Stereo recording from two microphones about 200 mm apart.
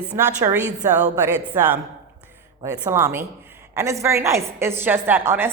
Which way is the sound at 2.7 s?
10° right (ahead or behind).